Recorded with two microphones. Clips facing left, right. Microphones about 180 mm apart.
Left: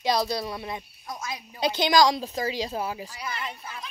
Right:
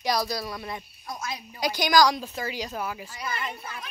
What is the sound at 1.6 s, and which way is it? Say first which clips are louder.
A child's voice: left 1 dB; 25° left (ahead or behind).